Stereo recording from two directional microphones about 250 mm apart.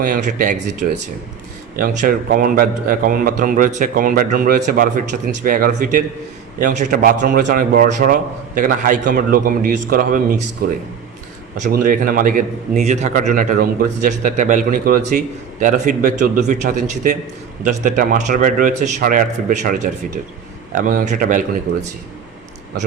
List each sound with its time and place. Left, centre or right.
0.0 s a man's voice: right